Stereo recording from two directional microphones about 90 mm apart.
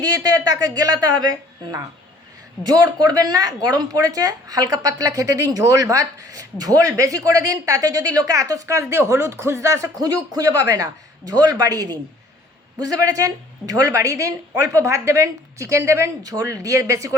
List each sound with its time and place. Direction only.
0.0 s a man's voice: 45° right (ahead or behind)
2.6 s a man's voice: 45° right (ahead or behind)
11.3 s a man's voice: 50° right (ahead or behind)